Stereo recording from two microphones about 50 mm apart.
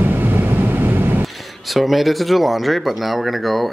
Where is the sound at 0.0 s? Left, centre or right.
Right.